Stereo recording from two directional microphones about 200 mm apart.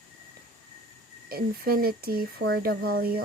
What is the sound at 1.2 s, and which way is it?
Speech, 50° right (ahead or behind).